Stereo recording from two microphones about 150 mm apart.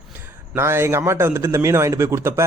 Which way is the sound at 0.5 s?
15° right (ahead or behind).